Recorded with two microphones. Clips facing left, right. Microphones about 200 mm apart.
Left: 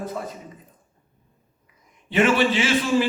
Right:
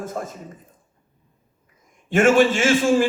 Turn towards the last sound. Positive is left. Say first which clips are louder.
# right 3 dB
turn(degrees=-45)  # may be behind; listen again after turning